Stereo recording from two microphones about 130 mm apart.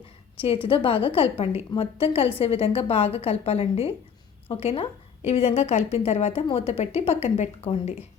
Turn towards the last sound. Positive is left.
turn(degrees=55)  # may be behind; listen again after turning